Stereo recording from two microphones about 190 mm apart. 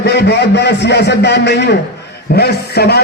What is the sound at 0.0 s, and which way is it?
A man's voice, 60° left (ahead or behind).